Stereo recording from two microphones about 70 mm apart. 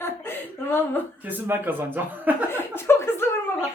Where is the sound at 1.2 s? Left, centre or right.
Right.